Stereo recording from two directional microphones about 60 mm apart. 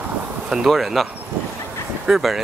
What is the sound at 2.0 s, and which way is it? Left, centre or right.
Speech, centre.